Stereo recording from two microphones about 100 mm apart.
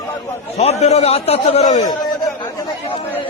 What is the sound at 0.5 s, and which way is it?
A man's voice, 90° left.